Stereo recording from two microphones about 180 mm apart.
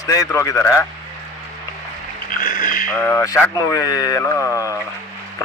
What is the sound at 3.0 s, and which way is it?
Speech, 15° left (ahead or behind).